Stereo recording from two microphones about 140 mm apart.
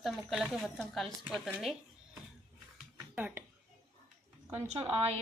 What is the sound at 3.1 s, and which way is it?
Speech, 10° right (ahead or behind).